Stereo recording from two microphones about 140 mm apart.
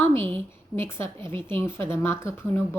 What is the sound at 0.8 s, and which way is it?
Speech, 20° left (ahead or behind).